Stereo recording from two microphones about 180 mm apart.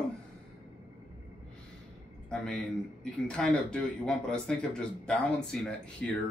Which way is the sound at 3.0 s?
5° left (ahead or behind).